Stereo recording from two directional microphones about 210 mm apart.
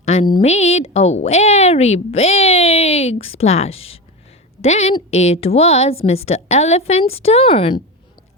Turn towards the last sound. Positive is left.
turn(degrees=25)  # may be behind; listen again after turning